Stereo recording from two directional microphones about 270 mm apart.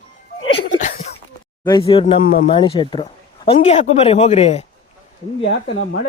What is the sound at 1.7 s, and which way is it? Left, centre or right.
A man's voice, centre.